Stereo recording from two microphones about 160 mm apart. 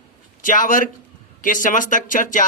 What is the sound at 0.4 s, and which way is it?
Speech, 55° left (ahead or behind).